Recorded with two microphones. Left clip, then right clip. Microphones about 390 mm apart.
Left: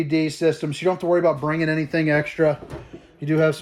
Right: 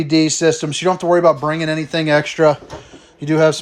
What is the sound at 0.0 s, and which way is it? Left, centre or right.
A man's voice, centre.